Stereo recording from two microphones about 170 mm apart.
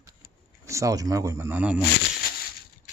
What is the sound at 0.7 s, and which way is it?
Speech, 20° right (ahead or behind).